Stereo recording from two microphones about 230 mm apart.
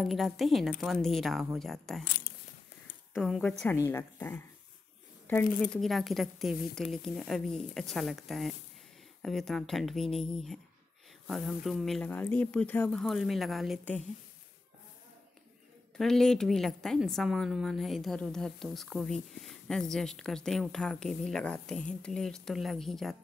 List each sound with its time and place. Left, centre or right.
0.0 s a woman's voice: centre
2.0 s a sound: left
3.2 s a woman's voice: centre
16.0 s a woman's voice: centre